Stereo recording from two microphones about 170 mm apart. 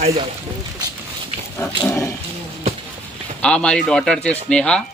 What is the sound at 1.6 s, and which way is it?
Speech, 20° left (ahead or behind).